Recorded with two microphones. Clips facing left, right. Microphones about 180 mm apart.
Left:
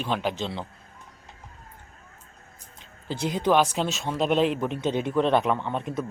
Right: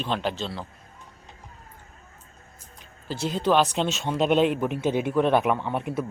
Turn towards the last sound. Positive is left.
turn(degrees=-10)  # may be behind; listen again after turning